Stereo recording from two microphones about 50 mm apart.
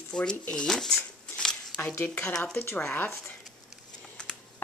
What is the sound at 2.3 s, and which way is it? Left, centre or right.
Speech, centre.